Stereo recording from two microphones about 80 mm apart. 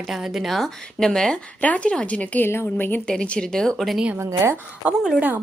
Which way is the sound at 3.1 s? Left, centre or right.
Centre.